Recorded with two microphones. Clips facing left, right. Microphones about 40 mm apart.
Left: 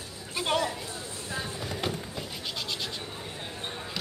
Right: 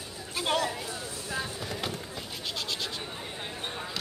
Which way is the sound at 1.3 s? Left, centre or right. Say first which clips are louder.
Even; centre.